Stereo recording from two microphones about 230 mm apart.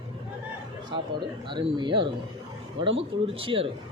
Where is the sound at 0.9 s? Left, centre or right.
Centre.